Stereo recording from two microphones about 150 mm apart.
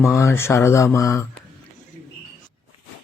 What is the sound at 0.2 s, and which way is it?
Speech, 20° left (ahead or behind).